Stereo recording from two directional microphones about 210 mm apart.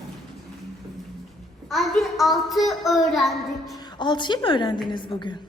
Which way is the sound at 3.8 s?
20° left (ahead or behind).